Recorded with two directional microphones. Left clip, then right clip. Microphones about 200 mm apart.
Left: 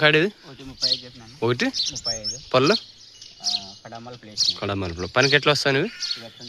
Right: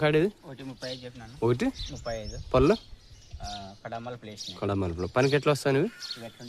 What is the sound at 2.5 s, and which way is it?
Speech, centre (ahead or behind).